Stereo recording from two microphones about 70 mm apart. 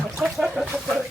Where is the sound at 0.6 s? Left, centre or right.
Centre.